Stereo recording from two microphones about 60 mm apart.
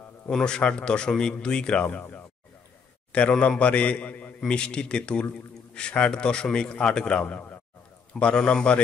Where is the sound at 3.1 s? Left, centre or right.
Centre.